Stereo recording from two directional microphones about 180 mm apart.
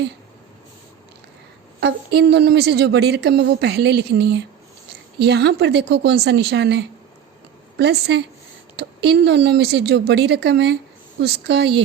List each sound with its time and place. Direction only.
1.8 s a woman's voice: 65° right (ahead or behind)